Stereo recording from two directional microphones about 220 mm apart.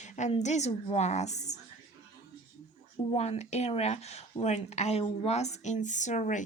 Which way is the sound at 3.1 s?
30° left (ahead or behind).